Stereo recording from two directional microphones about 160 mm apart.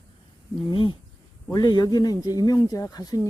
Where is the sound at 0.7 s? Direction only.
30° left (ahead or behind).